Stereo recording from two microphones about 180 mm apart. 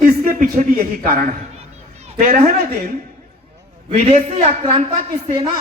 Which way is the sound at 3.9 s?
45° right (ahead or behind).